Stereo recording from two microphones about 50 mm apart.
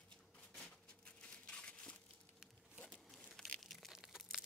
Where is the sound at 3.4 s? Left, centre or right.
Centre.